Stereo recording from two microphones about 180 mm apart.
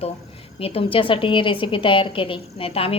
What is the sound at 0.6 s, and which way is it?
A woman's voice, 30° left (ahead or behind).